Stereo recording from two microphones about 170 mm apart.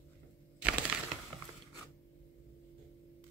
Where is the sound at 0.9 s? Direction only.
5° right (ahead or behind).